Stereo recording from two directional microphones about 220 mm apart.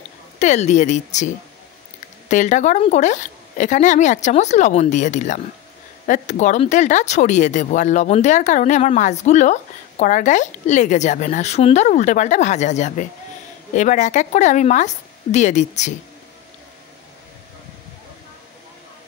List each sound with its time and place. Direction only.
0.4 s speech: 30° left (ahead or behind)